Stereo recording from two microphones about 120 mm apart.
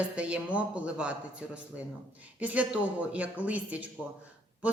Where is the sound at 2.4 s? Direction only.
10° right (ahead or behind).